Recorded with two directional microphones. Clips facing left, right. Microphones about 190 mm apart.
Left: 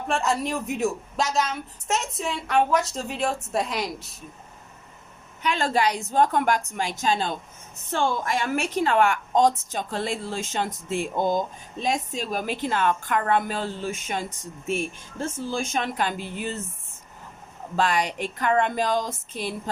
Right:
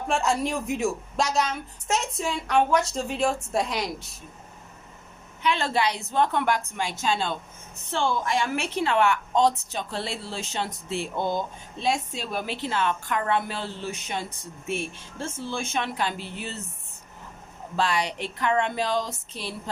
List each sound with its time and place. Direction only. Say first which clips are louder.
0.1 s a woman's voice: even; centre (ahead or behind)
5.4 s a woman's voice: left 1 dB; 45° left (ahead or behind)
15.4 s a woman's voice: left 1 dB; 40° left (ahead or behind)
17.7 s a woman's voice: left 2 dB; 50° left (ahead or behind)